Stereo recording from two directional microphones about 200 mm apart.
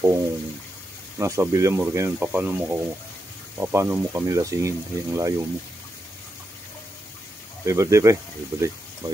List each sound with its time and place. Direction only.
0.0 s speech: 15° right (ahead or behind)
7.6 s speech: 15° right (ahead or behind)